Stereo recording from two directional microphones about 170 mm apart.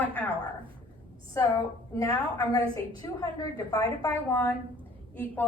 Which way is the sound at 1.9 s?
20° left (ahead or behind).